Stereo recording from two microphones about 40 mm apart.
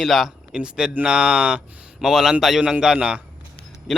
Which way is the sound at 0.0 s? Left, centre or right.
Centre.